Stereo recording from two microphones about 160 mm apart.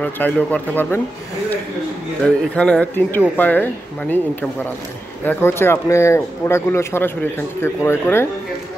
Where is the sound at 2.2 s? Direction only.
5° left (ahead or behind).